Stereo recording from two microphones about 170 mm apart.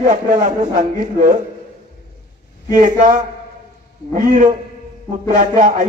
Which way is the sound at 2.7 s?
50° right (ahead or behind).